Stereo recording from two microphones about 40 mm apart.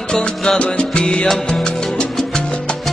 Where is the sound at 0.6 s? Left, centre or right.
Left.